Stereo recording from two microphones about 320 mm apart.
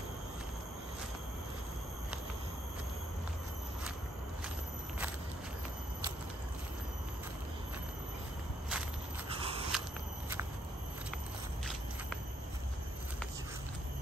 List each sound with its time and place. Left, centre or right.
9.4 s walk: centre